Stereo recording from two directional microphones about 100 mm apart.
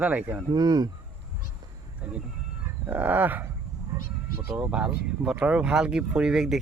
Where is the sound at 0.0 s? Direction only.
15° right (ahead or behind).